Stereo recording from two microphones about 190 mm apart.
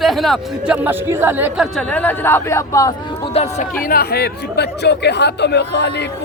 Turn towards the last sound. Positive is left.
turn(degrees=60)  # may be behind; listen again after turning